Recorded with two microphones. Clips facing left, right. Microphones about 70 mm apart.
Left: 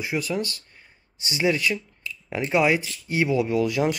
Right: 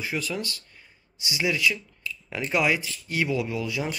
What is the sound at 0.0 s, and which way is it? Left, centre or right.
Speech, left.